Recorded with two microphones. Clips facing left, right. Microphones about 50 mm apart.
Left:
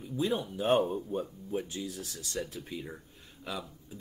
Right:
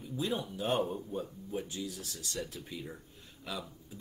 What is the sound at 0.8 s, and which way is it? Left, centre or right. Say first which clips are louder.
A man's voice: left 4 dB; centre.